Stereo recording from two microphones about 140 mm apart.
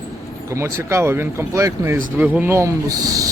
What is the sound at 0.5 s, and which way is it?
Speech, 20° right (ahead or behind).